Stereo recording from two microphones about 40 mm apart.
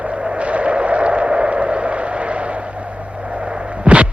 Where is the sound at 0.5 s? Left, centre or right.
Right.